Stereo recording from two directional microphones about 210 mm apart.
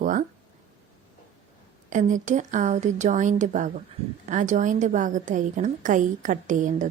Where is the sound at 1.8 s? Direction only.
35° right (ahead or behind).